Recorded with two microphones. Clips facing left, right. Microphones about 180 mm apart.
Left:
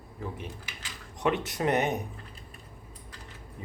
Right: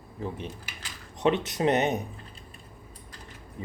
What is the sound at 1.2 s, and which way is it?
Speech, 20° right (ahead or behind).